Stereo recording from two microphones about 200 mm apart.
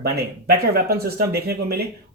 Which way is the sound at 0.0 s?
50° right (ahead or behind).